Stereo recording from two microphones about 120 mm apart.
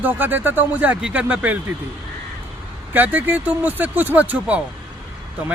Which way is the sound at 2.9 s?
15° right (ahead or behind).